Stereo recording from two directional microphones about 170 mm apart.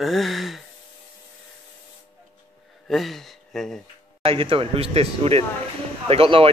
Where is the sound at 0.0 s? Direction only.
Centre (ahead or behind).